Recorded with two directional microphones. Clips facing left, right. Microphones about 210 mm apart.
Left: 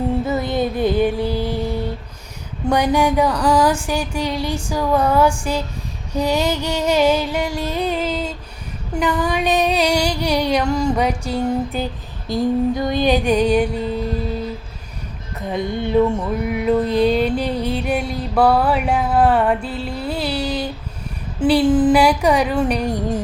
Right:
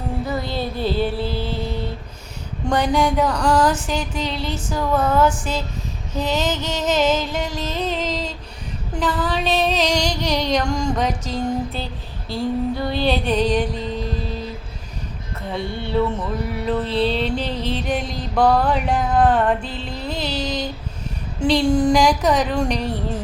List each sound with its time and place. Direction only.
0.3 s music: 20° left (ahead or behind)
15.4 s music: 15° left (ahead or behind)